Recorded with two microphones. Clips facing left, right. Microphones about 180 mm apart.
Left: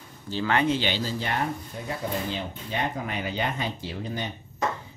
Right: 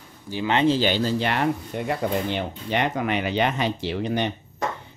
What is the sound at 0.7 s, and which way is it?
Speech, 45° right (ahead or behind).